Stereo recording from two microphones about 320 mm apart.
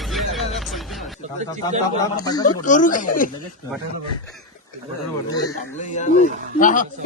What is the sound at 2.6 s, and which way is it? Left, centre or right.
Speech, left.